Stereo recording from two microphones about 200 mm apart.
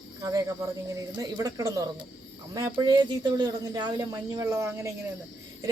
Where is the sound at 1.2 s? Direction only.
20° right (ahead or behind).